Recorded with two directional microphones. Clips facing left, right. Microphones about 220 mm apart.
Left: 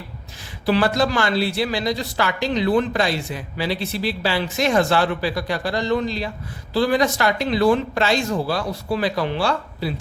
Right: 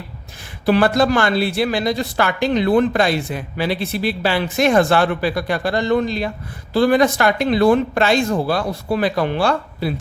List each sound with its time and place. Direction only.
0.6 s speech: 55° right (ahead or behind)